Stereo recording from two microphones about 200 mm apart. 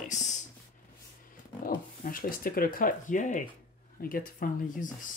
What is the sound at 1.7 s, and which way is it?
Speech, 45° left (ahead or behind).